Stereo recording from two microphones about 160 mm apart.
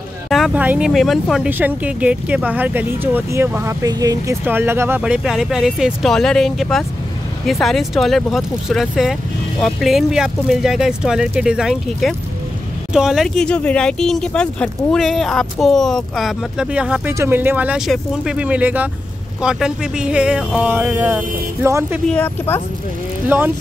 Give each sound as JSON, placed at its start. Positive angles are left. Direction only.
{"t": 0.3, "sound": "speech", "side_deg": -5}
{"t": 22.0, "sound": "speech", "side_deg": 10}
{"t": 23.2, "sound": "speech", "side_deg": -10}